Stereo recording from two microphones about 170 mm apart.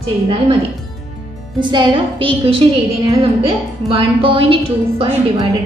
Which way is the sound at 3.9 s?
35° right (ahead or behind).